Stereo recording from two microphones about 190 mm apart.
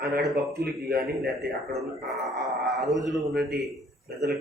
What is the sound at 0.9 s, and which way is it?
Speech, 60° right (ahead or behind).